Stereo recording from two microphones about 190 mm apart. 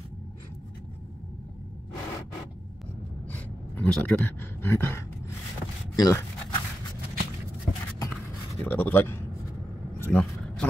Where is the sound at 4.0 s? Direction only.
10° left (ahead or behind).